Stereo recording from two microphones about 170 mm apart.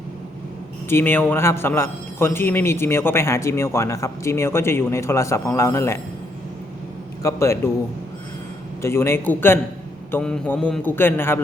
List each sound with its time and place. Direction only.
0.9 s a man's voice: 15° left (ahead or behind)
7.2 s a man's voice: 15° left (ahead or behind)
8.8 s a man's voice: 15° left (ahead or behind)